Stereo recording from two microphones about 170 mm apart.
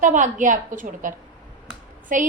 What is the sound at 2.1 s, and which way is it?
Speech, 50° right (ahead or behind).